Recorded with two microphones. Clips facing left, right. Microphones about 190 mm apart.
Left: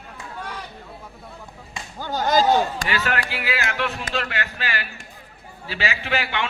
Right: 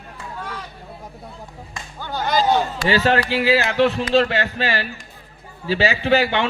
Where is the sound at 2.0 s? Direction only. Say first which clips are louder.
Left 1 dB; 45° left (ahead or behind).